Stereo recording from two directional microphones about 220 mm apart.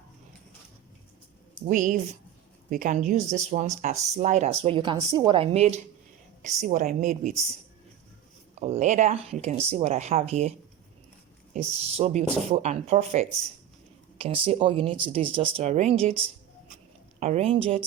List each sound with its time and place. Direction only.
1.6 s speech: 35° right (ahead or behind)
8.5 s speech: 30° right (ahead or behind)
11.5 s speech: 30° right (ahead or behind)
17.2 s speech: 30° right (ahead or behind)